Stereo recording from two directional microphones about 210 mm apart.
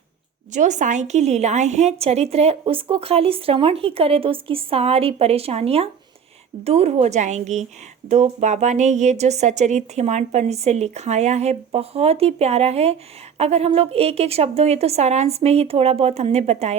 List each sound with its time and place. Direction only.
0.5 s a woman's voice: 35° right (ahead or behind)